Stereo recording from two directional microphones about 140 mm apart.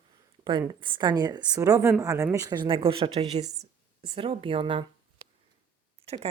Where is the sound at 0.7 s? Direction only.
35° right (ahead or behind).